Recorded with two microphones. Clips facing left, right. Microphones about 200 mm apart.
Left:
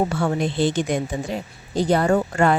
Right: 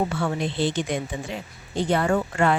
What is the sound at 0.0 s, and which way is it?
A woman's voice, 40° left (ahead or behind).